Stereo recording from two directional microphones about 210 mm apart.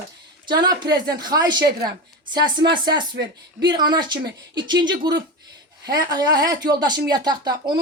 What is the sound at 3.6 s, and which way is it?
Speech, 20° right (ahead or behind).